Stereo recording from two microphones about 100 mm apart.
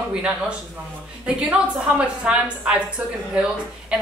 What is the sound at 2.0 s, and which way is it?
Speech, 10° right (ahead or behind).